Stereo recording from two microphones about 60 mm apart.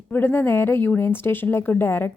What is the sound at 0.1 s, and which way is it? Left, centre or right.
Speech, left.